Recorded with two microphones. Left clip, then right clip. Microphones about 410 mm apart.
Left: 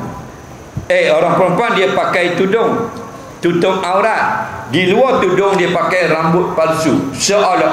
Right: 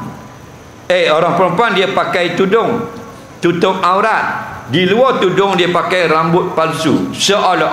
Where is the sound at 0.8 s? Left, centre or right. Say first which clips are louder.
Even; right.